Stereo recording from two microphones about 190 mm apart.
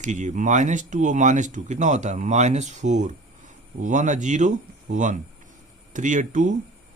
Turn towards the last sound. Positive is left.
turn(degrees=-40)  # may be behind; listen again after turning